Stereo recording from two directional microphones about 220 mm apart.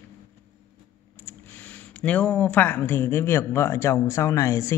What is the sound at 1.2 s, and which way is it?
Speech, 10° left (ahead or behind).